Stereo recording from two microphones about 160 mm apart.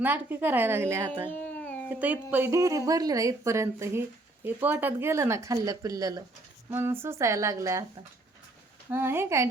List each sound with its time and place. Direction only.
0.0 s speech: 10° right (ahead or behind)
1.3 s a sound: 10° left (ahead or behind)
1.9 s speech: 10° right (ahead or behind)
8.9 s speech: 15° right (ahead or behind)